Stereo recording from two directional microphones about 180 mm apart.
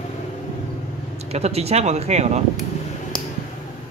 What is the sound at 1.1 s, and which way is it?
Speech, 35° right (ahead or behind).